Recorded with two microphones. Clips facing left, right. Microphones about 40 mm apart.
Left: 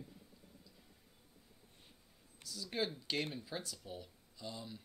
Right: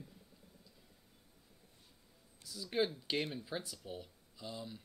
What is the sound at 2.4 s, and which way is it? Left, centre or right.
Speech, centre.